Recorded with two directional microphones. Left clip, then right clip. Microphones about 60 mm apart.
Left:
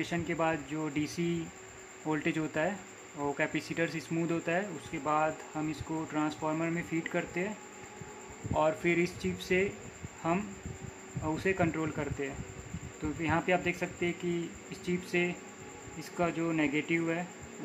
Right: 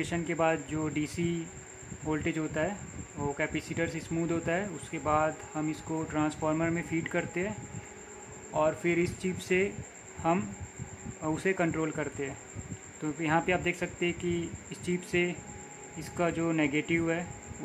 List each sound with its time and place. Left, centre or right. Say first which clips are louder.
0.0 s speech: right 3 dB; right
2.0 s speech: even; centre
5.7 s speech: right 2 dB; right
8.5 s speech: right 1 dB; centre
8.9 s speech: right 1 dB; right
11.4 s speech: right 1 dB; right